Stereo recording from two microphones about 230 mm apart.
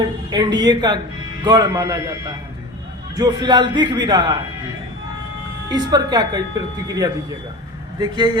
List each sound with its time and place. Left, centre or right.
0.0 s a man's voice: centre
5.6 s speech: centre